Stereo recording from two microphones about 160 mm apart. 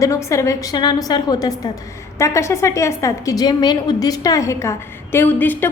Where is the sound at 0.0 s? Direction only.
20° left (ahead or behind).